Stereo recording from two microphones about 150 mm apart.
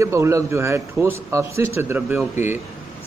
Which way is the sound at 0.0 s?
20° right (ahead or behind).